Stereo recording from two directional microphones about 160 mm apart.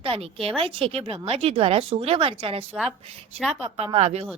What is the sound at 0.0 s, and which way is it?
Speech, 35° right (ahead or behind).